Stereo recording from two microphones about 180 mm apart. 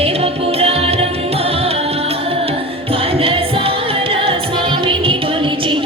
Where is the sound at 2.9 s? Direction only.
30° right (ahead or behind).